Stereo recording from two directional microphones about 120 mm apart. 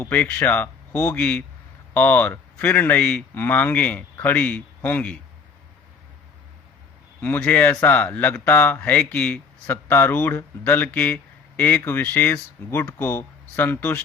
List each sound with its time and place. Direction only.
0.0 s speech: 15° left (ahead or behind)
7.2 s speech: 15° left (ahead or behind)